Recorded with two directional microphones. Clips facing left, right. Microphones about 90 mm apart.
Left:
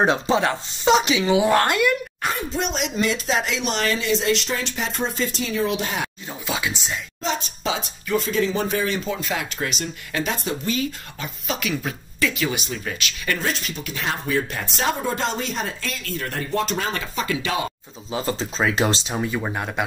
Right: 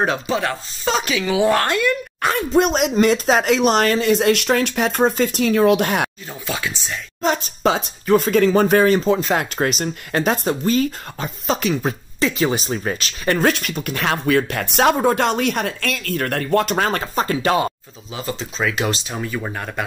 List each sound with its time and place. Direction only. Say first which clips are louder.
0.0 s speech: left 1 dB; 25° left (ahead or behind)
1.5 s speech: right 1 dB; 10° left (ahead or behind)
2.5 s speech: right 9 dB; 50° right (ahead or behind)
6.4 s speech: even; 15° left (ahead or behind)
7.2 s speech: right 8 dB; 50° right (ahead or behind)
13.4 s speech: right 8 dB; 60° right (ahead or behind)
14.0 s speech: right 6 dB; 70° right (ahead or behind); by 17.6 s 45° right (ahead or behind)
18.1 s speech: left 2 dB; 35° left (ahead or behind)
19.1 s speech: left 1 dB; 15° left (ahead or behind)